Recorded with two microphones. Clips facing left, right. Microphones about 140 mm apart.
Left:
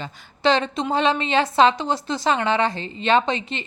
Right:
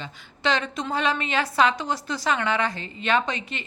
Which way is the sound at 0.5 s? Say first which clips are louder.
Left 5 dB; 25° left (ahead or behind).